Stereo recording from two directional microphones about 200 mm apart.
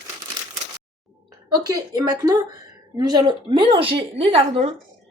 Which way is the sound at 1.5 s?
20° right (ahead or behind).